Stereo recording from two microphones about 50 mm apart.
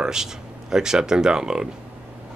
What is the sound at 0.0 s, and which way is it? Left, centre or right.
Speech, centre.